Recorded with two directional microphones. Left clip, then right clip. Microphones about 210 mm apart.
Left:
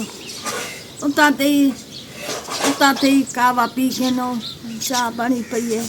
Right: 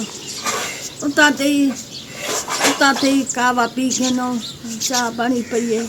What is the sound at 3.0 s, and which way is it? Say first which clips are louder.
Speech: left 1 dB; 15° left (ahead or behind).